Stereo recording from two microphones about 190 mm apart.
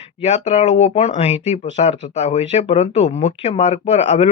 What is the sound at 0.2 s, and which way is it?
Speech, 35° left (ahead or behind).